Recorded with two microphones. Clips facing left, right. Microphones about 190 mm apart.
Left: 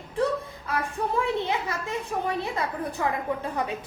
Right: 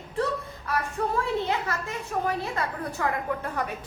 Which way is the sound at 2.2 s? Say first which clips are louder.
Even; 15° left (ahead or behind).